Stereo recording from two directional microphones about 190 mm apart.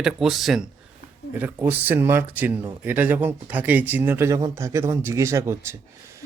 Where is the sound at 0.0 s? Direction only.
5° right (ahead or behind).